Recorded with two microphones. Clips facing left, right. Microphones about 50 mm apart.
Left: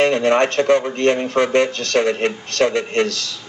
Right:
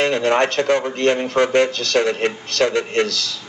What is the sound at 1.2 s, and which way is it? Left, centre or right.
Speech, left.